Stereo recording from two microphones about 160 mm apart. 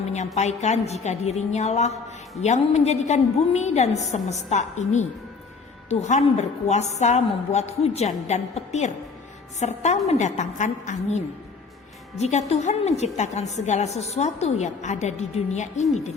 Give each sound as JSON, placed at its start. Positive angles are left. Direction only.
{"t": 0.3, "sound": "a woman's voice", "side_deg": 45}
{"t": 12.2, "sound": "a woman's voice", "side_deg": 45}